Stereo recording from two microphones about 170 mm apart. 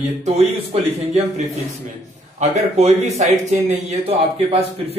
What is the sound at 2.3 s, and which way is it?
Speech, 40° right (ahead or behind).